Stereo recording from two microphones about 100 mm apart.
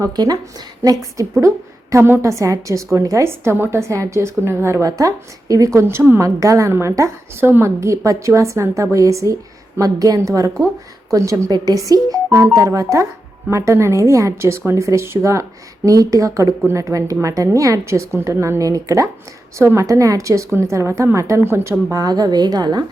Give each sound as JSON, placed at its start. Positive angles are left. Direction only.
{"t": 0.0, "sound": "a woman's voice", "side_deg": -40}
{"t": 22.0, "sound": "a woman's voice", "side_deg": -40}